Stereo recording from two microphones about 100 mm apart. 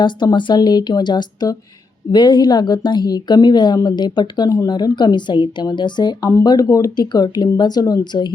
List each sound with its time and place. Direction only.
0.0 s a woman's voice: 50° left (ahead or behind)